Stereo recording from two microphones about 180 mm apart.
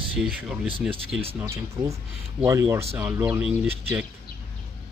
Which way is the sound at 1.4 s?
15° right (ahead or behind).